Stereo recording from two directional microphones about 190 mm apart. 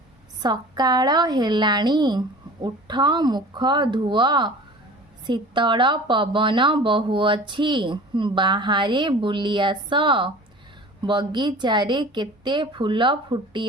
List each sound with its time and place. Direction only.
0.4 s a woman's voice: 20° right (ahead or behind)